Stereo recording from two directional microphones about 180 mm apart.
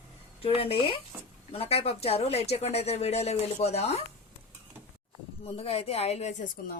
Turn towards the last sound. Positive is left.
turn(degrees=40)  # may be behind; listen again after turning